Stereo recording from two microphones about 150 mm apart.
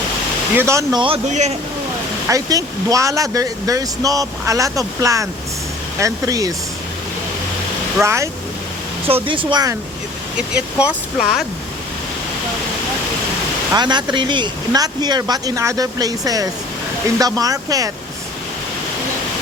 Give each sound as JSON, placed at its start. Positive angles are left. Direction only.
{"t": 0.5, "sound": "speech", "side_deg": -20}
{"t": 1.3, "sound": "speech", "side_deg": -50}
{"t": 2.2, "sound": "speech", "side_deg": -20}
{"t": 8.0, "sound": "speech", "side_deg": -20}
{"t": 9.0, "sound": "speech", "side_deg": -35}
{"t": 10.3, "sound": "speech", "side_deg": -5}
{"t": 13.7, "sound": "speech", "side_deg": -30}